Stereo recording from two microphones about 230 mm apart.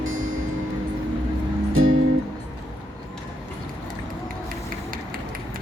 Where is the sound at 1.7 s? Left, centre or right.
Right.